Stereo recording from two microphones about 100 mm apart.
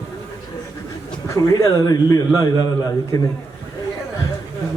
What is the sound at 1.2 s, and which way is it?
A man's voice, 35° left (ahead or behind).